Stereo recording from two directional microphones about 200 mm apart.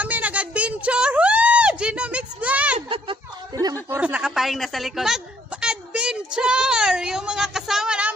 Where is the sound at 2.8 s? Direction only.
25° right (ahead or behind).